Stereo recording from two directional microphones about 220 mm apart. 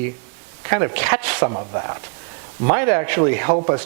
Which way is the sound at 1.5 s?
25° right (ahead or behind).